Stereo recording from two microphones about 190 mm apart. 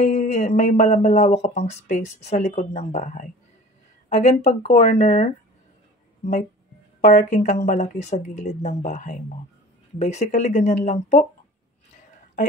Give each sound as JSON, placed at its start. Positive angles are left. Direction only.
{"t": 0.0, "sound": "speech", "side_deg": 35}
{"t": 7.0, "sound": "speech", "side_deg": 40}